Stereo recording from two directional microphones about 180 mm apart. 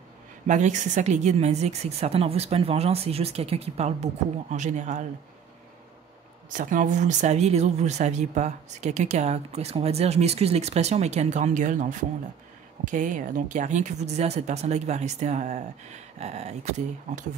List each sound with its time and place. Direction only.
0.5 s speech: 40° right (ahead or behind)
6.5 s speech: 45° right (ahead or behind)